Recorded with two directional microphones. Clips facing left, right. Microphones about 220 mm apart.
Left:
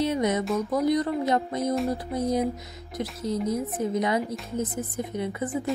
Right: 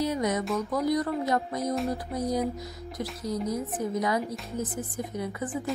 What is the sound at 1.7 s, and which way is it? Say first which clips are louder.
Speech: left 3 dB; centre (ahead or behind).